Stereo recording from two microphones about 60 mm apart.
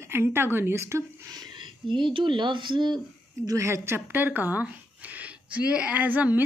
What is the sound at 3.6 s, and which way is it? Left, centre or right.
Speech, right.